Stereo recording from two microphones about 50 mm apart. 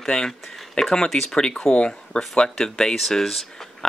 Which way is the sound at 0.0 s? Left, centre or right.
Centre.